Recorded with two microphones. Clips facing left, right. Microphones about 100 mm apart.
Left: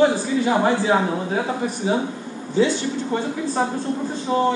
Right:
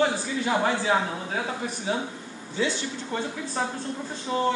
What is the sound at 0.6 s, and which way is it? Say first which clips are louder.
Speech: left 5 dB; 20° left (ahead or behind).